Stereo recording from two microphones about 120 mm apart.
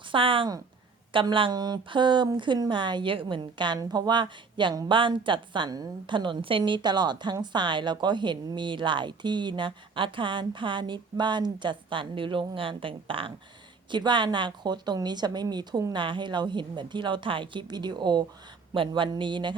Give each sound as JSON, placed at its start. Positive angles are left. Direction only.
{"t": 0.1, "sound": "speech", "side_deg": -45}